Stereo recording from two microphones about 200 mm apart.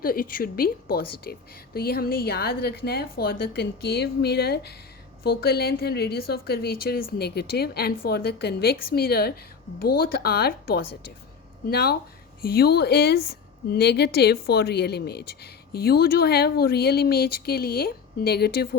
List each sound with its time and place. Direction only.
0.0 s a woman's voice: 45° left (ahead or behind)